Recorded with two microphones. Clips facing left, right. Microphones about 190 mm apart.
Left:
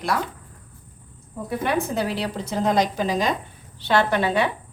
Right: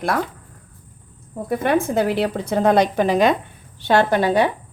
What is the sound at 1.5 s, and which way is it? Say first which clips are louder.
A woman's voice: right 5 dB; 50° right (ahead or behind).